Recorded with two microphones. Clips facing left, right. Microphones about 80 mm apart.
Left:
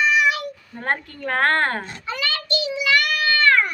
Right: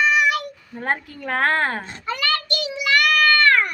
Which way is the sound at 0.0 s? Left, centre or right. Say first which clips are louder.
Even; right.